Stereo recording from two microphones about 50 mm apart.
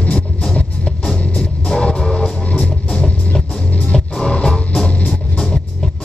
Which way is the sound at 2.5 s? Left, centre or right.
Left.